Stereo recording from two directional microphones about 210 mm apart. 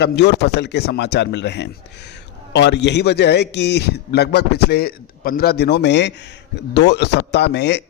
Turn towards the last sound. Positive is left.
turn(degrees=55)  # may be behind; listen again after turning